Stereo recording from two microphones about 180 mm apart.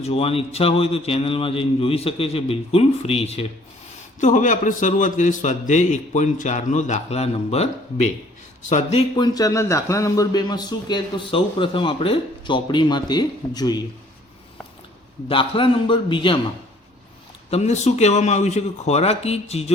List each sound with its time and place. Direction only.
0.0 s a man's voice: 35° left (ahead or behind)
15.3 s a man's voice: 30° left (ahead or behind)
17.5 s speech: 40° left (ahead or behind)